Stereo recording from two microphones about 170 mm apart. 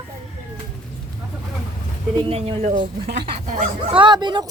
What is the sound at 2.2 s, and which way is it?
Speech, 35° right (ahead or behind).